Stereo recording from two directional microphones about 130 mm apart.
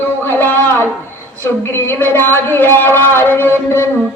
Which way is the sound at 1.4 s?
20° left (ahead or behind).